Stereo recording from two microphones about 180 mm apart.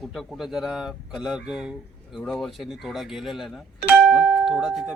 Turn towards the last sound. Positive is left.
turn(degrees=0)  # may be behind; listen again after turning